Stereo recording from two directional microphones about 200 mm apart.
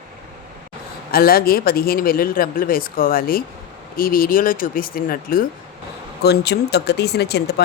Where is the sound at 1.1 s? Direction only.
50° left (ahead or behind).